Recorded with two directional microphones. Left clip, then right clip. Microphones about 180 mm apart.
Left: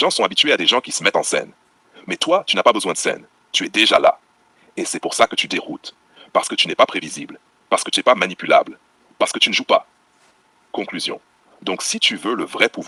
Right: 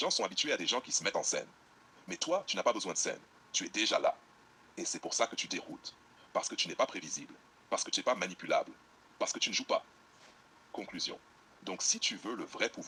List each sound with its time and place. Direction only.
0.0 s speech: 55° left (ahead or behind)